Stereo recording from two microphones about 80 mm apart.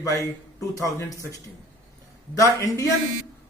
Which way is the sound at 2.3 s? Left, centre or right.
Left.